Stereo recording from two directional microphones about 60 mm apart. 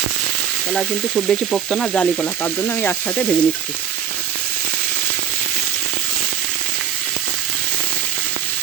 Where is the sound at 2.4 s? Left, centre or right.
Left.